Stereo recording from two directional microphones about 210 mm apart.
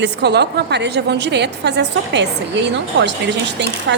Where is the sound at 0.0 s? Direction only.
55° right (ahead or behind).